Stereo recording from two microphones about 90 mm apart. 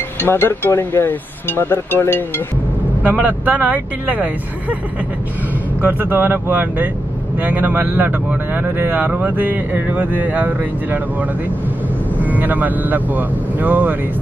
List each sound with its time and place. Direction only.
0.2 s speech: 25° left (ahead or behind)
3.2 s speech: 20° right (ahead or behind)
5.8 s a man's voice: 20° right (ahead or behind)
12.2 s a man's voice: 20° right (ahead or behind)